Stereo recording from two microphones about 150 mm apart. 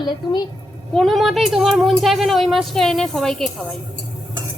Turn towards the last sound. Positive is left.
turn(degrees=5)  # may be behind; listen again after turning